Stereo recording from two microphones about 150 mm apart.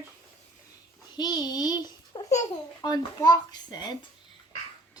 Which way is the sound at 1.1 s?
30° left (ahead or behind).